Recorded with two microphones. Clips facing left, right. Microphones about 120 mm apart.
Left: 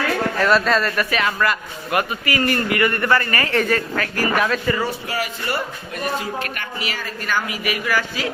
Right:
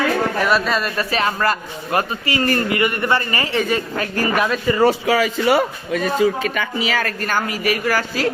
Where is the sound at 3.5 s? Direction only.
Centre (ahead or behind).